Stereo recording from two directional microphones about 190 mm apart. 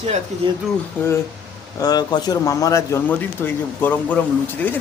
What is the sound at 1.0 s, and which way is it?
Speech, 10° left (ahead or behind).